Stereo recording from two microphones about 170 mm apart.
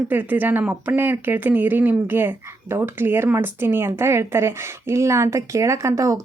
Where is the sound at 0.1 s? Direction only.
10° right (ahead or behind).